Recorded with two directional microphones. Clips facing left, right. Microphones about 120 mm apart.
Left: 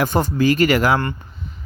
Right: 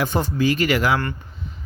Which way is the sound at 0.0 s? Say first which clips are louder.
Left 3 dB; 45° left (ahead or behind).